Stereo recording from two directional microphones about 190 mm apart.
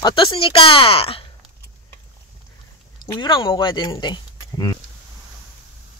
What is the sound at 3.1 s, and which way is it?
Speech, 25° left (ahead or behind).